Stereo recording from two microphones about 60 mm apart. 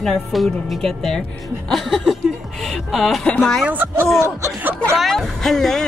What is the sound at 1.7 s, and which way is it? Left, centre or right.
Speech, centre.